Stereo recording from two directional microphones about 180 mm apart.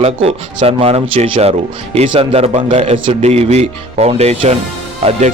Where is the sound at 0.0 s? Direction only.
35° right (ahead or behind).